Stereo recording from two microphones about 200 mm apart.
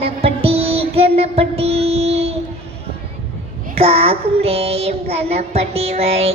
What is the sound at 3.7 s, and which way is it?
Child singing, 30° right (ahead or behind).